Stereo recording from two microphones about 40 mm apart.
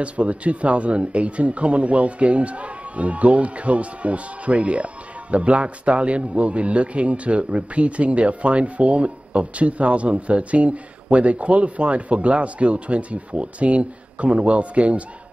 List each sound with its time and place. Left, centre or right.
0.0 s speech: right